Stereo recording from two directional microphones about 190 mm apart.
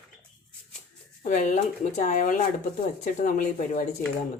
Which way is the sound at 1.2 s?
40° left (ahead or behind).